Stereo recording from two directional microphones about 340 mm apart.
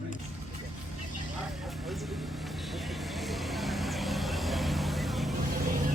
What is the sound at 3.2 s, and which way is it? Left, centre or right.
Vehicle, centre.